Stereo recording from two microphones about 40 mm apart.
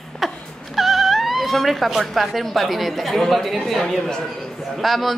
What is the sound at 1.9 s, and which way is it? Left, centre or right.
A woman's voice, centre.